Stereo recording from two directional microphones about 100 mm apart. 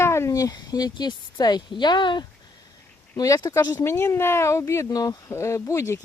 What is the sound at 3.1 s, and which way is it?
Speech, 35° left (ahead or behind).